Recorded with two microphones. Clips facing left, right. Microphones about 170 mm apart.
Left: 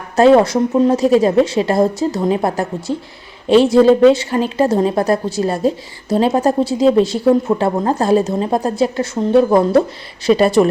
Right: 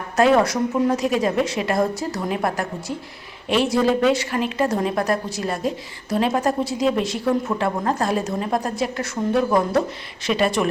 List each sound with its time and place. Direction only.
0.2 s a woman's voice: 30° left (ahead or behind)